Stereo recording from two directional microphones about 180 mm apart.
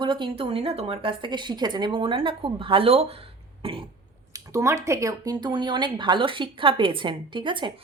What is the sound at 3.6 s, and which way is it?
Cough, 30° right (ahead or behind).